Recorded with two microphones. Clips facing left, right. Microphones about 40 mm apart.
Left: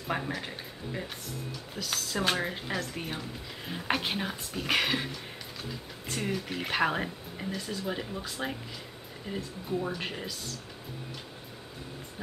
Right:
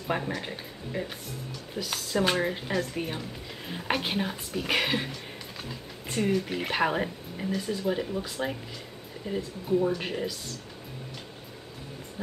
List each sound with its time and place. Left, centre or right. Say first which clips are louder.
0.1 s speech: right 3 dB; centre
6.1 s speech: right 6 dB; centre